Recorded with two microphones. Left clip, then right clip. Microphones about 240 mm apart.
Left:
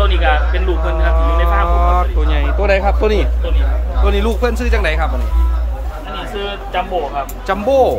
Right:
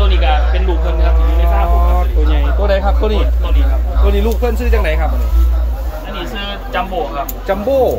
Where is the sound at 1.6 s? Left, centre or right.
Centre.